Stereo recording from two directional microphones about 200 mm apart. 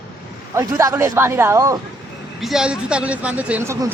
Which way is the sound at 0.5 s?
15° right (ahead or behind).